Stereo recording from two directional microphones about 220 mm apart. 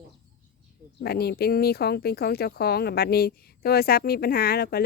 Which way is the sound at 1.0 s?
45° left (ahead or behind).